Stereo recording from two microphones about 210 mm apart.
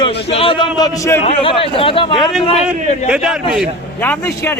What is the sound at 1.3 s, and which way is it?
A man's voice, 25° left (ahead or behind).